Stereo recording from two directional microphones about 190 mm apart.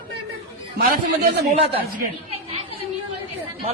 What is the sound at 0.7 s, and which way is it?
Speech, 55° right (ahead or behind).